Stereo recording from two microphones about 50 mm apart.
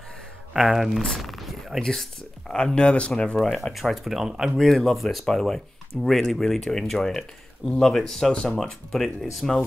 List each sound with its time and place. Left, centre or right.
0.7 s speech: centre
1.2 s a sound: centre
1.8 s speech: centre
3.3 s speech: centre
4.6 s speech: centre
8.3 s speech: left
8.6 s speech: centre